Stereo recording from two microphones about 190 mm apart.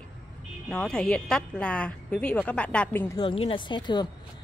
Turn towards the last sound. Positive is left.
turn(degrees=25)  # may be behind; listen again after turning